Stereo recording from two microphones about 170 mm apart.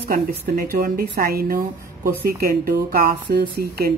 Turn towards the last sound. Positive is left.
turn(degrees=-65)  # may be behind; listen again after turning